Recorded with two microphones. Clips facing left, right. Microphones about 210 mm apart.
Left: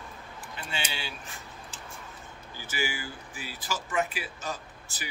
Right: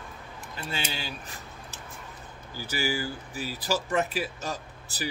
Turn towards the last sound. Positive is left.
turn(degrees=-35)  # may be behind; listen again after turning